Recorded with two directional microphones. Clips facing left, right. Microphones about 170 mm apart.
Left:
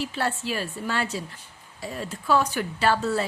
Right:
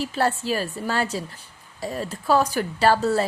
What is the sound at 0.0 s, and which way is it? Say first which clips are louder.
Speech: right 4 dB; 40° right (ahead or behind).